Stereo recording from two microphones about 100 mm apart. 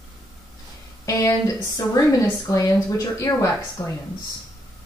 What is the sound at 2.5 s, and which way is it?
Speech, 35° left (ahead or behind).